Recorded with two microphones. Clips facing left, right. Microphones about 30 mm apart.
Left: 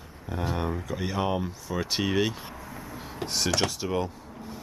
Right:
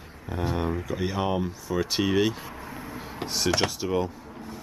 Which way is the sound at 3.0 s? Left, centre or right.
Centre.